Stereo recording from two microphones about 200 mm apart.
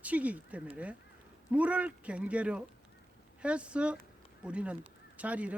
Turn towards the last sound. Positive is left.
turn(degrees=-5)  # may be behind; listen again after turning